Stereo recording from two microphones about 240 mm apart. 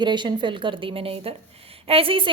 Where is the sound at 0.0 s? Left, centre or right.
Centre.